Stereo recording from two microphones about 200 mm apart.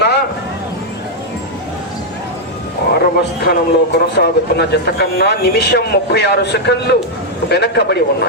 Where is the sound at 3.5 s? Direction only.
55° left (ahead or behind).